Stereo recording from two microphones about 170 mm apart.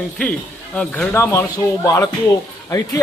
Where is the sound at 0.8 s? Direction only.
10° left (ahead or behind).